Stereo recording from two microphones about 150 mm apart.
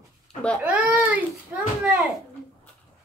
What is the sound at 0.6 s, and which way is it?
Speech, 10° right (ahead or behind).